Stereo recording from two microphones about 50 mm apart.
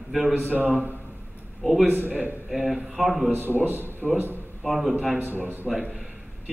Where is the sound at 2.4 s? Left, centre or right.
Centre.